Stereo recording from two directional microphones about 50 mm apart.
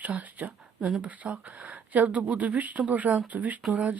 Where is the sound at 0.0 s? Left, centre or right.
Right.